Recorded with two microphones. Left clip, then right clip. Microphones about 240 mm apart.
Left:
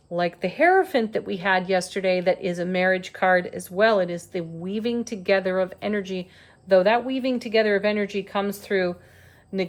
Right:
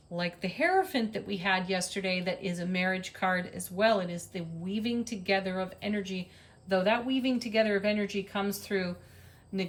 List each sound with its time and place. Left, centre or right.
0.2 s a woman's voice: centre
6.7 s speech: left